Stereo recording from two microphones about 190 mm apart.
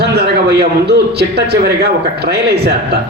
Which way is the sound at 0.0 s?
55° right (ahead or behind).